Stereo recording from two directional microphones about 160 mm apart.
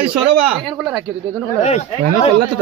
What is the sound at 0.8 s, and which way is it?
Speech, 5° right (ahead or behind).